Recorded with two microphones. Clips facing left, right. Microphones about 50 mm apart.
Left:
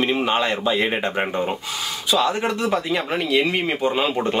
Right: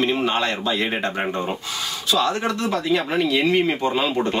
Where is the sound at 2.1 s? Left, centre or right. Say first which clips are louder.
Left 1 dB; centre.